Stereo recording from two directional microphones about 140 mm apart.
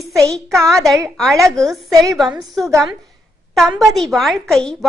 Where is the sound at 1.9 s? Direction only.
25° right (ahead or behind).